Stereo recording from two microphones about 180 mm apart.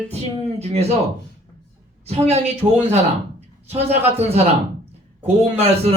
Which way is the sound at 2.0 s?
35° right (ahead or behind).